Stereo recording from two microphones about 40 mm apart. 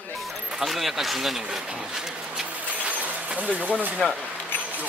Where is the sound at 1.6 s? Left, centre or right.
Centre.